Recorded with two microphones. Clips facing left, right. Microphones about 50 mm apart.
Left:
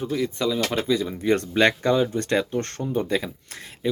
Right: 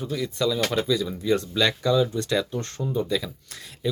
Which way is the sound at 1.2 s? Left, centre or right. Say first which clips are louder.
Left 5 dB; left.